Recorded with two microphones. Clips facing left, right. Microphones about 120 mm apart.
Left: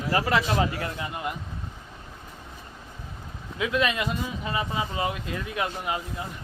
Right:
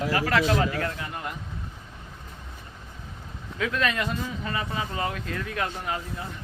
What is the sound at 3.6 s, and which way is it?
Speech, 10° left (ahead or behind).